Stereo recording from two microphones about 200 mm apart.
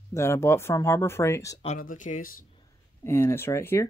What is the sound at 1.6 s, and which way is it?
Speech, 40° left (ahead or behind).